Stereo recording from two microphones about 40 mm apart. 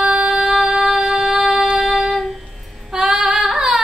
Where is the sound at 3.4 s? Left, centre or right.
Centre.